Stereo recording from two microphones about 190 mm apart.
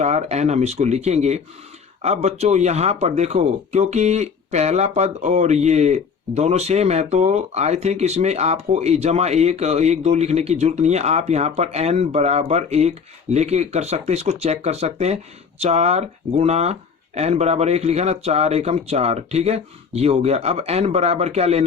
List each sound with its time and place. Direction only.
0.0 s speech: 35° right (ahead or behind)